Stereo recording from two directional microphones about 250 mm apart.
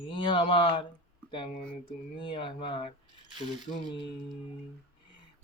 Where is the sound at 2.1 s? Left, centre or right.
Centre.